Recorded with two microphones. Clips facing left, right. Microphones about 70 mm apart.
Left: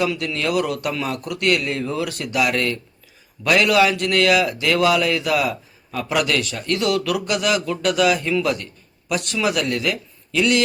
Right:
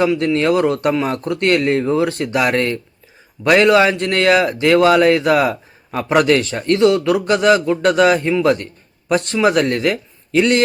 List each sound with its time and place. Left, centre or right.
0.0 s a man's voice: right